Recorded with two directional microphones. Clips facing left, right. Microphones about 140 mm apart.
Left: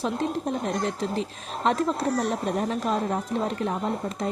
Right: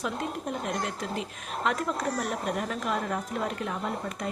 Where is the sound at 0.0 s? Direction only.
35° left (ahead or behind).